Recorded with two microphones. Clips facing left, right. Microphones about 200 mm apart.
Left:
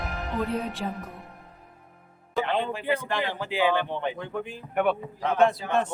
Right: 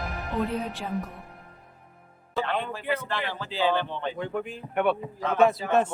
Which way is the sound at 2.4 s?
20° left (ahead or behind).